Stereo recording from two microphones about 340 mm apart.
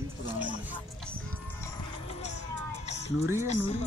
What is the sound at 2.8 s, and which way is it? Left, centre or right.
Music, centre.